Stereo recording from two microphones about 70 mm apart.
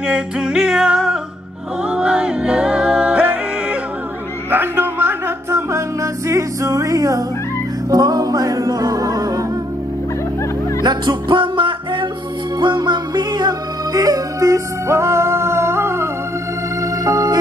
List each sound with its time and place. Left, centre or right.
0.0 s music: centre
4.5 s music: right
10.8 s music: right
12.6 s music: right
16.8 s organ: right